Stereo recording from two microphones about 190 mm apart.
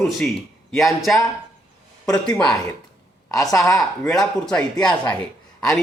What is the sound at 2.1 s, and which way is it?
Speech, 5° left (ahead or behind).